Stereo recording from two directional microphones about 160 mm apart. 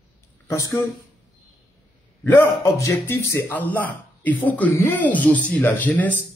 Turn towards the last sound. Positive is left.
turn(degrees=10)  # may be behind; listen again after turning